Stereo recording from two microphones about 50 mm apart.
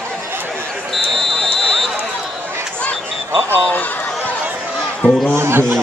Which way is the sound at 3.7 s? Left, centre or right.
Left.